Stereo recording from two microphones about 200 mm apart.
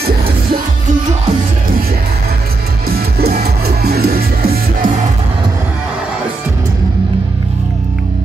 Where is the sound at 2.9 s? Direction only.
50° right (ahead or behind).